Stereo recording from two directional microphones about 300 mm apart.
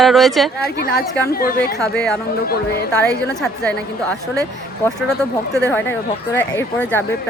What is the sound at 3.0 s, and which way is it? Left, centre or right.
Speech, centre.